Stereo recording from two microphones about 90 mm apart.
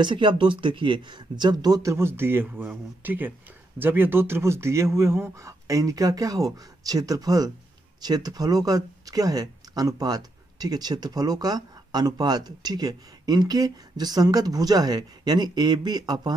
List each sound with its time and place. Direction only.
0.0 s speech: 65° right (ahead or behind)